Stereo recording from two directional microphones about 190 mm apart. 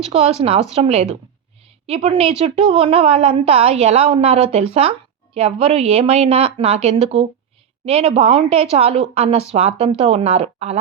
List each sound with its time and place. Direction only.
0.0 s a woman's voice: 30° right (ahead or behind)